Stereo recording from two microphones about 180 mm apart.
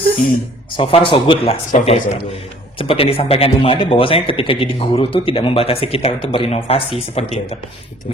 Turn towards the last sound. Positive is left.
turn(degrees=35)  # may be behind; listen again after turning